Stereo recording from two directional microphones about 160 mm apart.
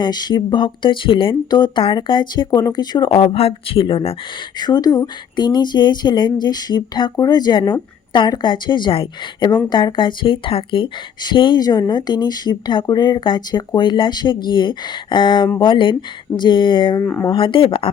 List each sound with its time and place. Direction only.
0.0 s speech: 25° left (ahead or behind)
17.0 s speech: 10° left (ahead or behind)
17.2 s speech: 30° left (ahead or behind)